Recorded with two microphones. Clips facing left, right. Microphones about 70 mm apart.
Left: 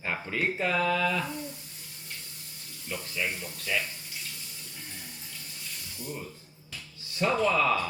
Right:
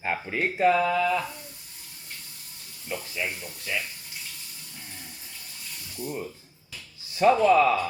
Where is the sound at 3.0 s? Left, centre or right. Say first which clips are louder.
Right 1 dB; centre.